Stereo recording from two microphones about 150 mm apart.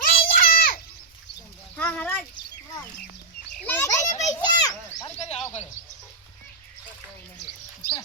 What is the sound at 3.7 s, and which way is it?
Children playing, 20° left (ahead or behind).